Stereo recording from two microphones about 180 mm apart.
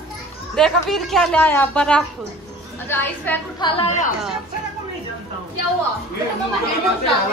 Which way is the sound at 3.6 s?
25° left (ahead or behind).